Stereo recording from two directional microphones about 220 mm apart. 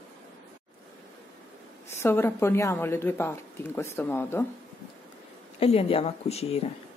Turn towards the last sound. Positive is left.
turn(degrees=30)  # may be behind; listen again after turning